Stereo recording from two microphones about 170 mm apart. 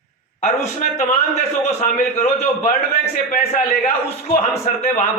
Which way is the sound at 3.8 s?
50° left (ahead or behind).